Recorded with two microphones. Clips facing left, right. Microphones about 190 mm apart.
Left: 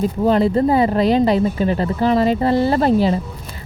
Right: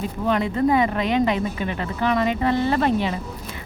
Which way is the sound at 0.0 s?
35° left (ahead or behind).